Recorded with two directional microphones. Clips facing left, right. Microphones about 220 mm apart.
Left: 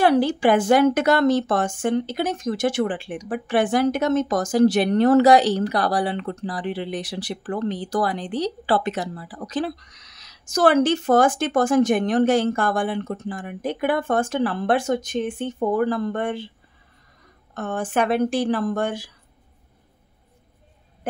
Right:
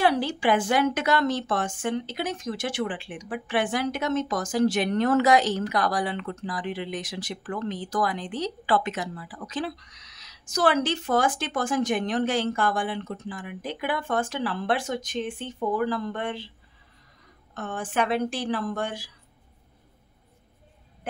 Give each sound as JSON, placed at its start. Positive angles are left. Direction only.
{"t": 0.0, "sound": "speech", "side_deg": 45}
{"t": 17.6, "sound": "speech", "side_deg": 45}